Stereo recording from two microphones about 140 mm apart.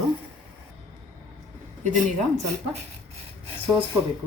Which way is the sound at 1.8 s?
65° right (ahead or behind).